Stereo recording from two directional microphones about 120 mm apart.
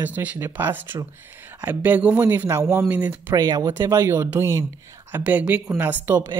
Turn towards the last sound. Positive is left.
turn(degrees=-20)  # may be behind; listen again after turning